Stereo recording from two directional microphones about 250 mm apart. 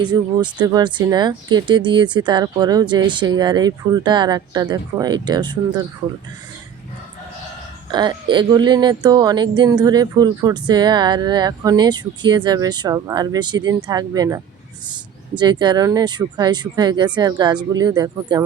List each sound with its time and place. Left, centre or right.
0.0 s speech: centre
7.9 s speech: centre